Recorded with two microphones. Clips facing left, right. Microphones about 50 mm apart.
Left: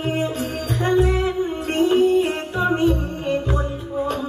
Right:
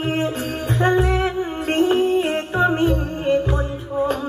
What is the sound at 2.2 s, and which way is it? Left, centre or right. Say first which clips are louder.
Music: right 2 dB; right.